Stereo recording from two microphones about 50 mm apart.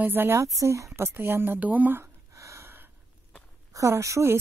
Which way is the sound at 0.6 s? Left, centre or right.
Right.